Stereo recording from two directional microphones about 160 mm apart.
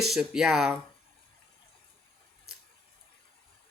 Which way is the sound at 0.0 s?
5° right (ahead or behind).